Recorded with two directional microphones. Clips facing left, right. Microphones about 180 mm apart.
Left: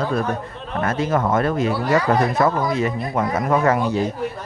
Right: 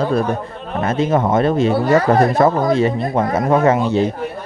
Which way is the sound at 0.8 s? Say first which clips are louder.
Right 4 dB; 25° right (ahead or behind).